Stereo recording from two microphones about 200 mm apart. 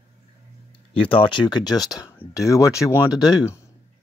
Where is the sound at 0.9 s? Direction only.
25° left (ahead or behind).